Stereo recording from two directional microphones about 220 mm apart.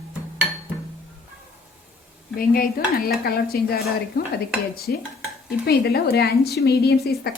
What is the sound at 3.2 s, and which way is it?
Speech, 45° left (ahead or behind).